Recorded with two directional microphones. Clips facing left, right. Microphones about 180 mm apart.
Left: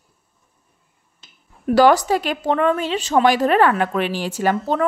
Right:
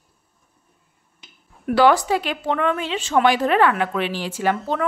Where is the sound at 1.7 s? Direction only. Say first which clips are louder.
Left 2 dB; 40° left (ahead or behind).